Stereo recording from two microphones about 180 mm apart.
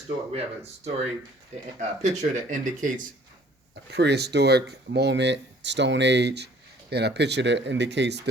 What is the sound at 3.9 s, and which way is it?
Speech, 70° right (ahead or behind).